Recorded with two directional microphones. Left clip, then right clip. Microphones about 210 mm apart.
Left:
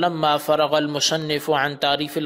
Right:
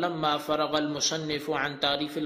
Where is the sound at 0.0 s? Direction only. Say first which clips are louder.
Left 8 dB; 40° left (ahead or behind).